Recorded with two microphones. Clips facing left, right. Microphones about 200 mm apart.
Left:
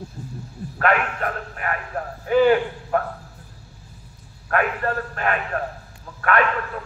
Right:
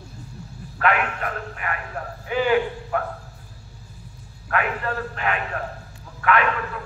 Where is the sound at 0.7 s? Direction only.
45° left (ahead or behind).